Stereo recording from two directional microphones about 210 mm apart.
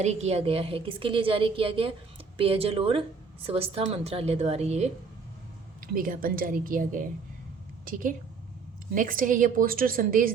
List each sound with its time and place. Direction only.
0.0 s a woman's voice: 30° right (ahead or behind)
5.8 s a woman's voice: 40° right (ahead or behind)